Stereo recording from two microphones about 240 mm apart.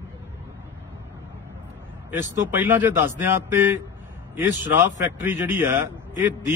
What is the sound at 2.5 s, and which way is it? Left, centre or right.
A man's voice, centre.